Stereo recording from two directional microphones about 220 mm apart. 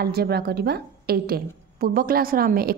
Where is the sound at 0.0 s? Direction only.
45° right (ahead or behind).